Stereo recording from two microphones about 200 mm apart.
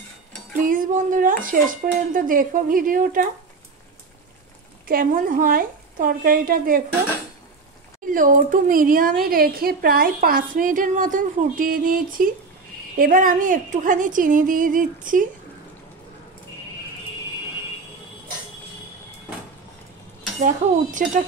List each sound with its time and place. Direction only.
0.6 s a woman's voice: 40° right (ahead or behind)
4.8 s a woman's voice: 45° right (ahead or behind)
8.1 s a woman's voice: 45° right (ahead or behind)
20.3 s speech: 40° right (ahead or behind)